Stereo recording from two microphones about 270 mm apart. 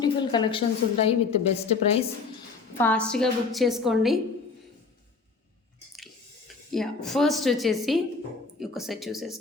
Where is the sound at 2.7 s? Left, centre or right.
Centre.